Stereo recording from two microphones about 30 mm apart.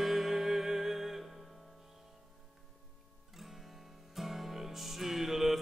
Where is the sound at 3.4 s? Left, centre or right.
Centre.